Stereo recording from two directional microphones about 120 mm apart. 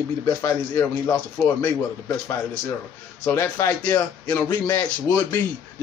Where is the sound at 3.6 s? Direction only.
20° left (ahead or behind).